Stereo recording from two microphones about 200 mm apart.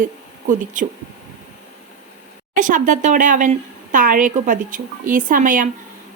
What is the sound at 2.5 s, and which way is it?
Speech, 40° right (ahead or behind).